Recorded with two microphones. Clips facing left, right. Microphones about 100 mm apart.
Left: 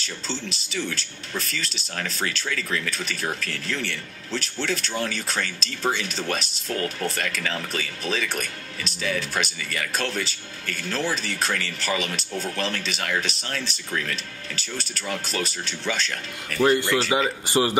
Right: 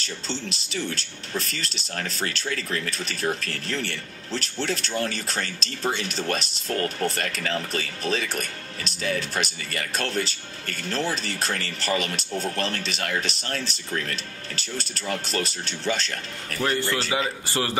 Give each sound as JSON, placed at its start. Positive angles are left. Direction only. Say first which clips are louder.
{"t": 0.7, "sound": "speech", "louder": "left 1 dB", "side_deg": -35}
{"t": 16.9, "sound": "a man's voice", "louder": "left 4 dB", "side_deg": 30}
{"t": 17.5, "sound": "a man's voice", "louder": "left 5 dB", "side_deg": 20}